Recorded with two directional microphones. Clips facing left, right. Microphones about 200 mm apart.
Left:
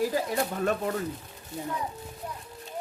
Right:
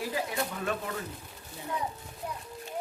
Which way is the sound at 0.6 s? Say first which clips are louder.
Left 6 dB; 40° left (ahead or behind).